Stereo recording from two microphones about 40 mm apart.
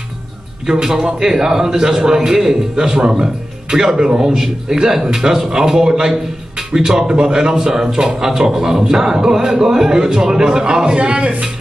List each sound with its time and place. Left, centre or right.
0.7 s a man's voice: centre
11.0 s a man's voice: right